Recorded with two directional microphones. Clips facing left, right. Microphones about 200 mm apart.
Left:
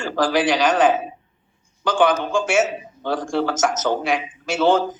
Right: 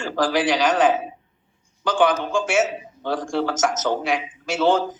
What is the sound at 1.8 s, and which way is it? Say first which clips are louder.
Speech: left 1 dB; 55° left (ahead or behind).